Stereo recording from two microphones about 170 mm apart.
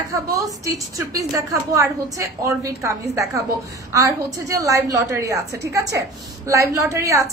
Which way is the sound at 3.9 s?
20° right (ahead or behind).